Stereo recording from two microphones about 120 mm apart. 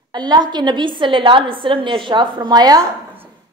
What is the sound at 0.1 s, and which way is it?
A woman's voice, 35° right (ahead or behind).